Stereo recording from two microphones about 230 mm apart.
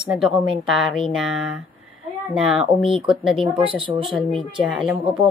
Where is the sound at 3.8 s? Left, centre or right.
Right.